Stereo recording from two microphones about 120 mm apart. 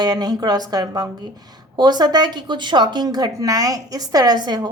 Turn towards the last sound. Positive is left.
turn(degrees=-35)  # may be behind; listen again after turning